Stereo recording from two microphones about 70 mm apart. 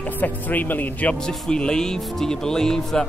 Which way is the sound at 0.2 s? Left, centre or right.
Left.